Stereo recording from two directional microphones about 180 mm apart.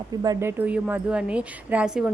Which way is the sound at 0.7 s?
10° right (ahead or behind).